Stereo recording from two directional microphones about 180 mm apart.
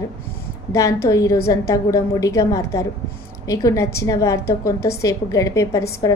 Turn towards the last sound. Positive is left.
turn(degrees=20)  # may be behind; listen again after turning